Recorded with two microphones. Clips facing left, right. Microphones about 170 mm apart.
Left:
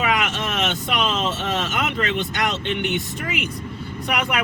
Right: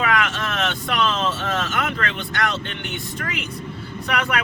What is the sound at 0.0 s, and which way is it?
Speech, 20° left (ahead or behind).